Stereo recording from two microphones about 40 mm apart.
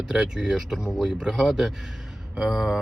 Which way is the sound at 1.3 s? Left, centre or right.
Centre.